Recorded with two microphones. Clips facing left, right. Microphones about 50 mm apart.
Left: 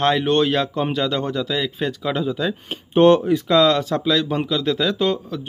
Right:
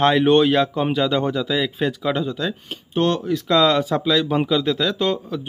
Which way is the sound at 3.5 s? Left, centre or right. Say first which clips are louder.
Even; centre.